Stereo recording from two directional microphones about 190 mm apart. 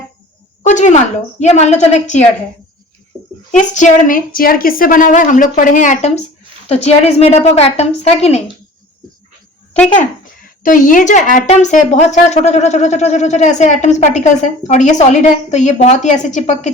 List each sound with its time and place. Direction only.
0.6 s speech: 40° left (ahead or behind)
3.8 s a woman's voice: 40° left (ahead or behind)
10.6 s speech: 45° left (ahead or behind)